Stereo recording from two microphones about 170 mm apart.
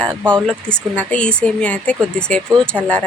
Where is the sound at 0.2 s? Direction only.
10° right (ahead or behind).